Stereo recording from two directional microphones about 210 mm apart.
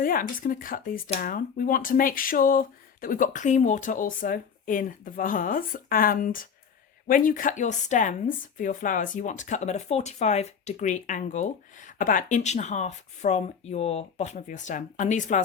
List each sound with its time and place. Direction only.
0.0 s speech: 40° left (ahead or behind)